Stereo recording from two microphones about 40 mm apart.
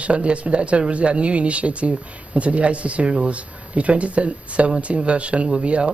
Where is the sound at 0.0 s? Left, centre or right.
Right.